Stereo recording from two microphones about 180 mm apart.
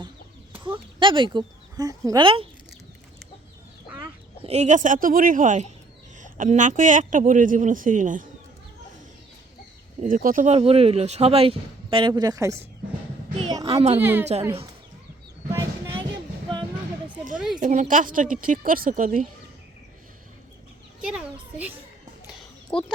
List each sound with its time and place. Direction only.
0.6 s speech: 25° right (ahead or behind)
3.8 s chicken: 10° right (ahead or behind)
4.4 s a man's voice: 40° right (ahead or behind)
10.0 s speech: 50° right (ahead or behind); by 12.6 s 15° right (ahead or behind)
13.7 s speech: 35° right (ahead or behind)
14.0 s a woman's voice: 10° right (ahead or behind)
17.3 s a sound: 5° right (ahead or behind)
17.6 s a man's voice: 45° right (ahead or behind)
22.7 s speech: 30° left (ahead or behind)